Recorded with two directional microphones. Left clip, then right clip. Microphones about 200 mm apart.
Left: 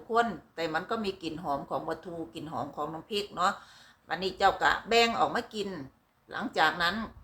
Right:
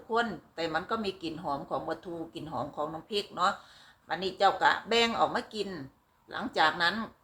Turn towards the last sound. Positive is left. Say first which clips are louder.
# even
turn(degrees=5)  # may be behind; listen again after turning